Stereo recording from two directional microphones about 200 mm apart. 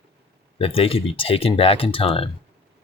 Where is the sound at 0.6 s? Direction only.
30° left (ahead or behind).